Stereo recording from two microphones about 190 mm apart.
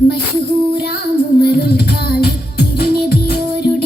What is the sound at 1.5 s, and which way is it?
Music, 55° left (ahead or behind).